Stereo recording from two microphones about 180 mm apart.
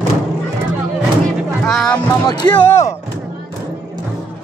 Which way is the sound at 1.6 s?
Centre (ahead or behind).